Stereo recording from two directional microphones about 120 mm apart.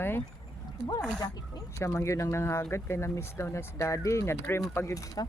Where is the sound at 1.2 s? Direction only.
35° left (ahead or behind).